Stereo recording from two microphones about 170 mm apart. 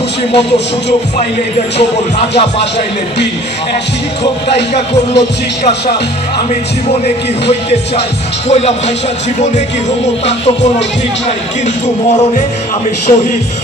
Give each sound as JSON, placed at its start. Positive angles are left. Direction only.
{"t": 4.7, "sound": "speech", "side_deg": 35}
{"t": 8.5, "sound": "speech", "side_deg": 40}
{"t": 13.1, "sound": "speech", "side_deg": 35}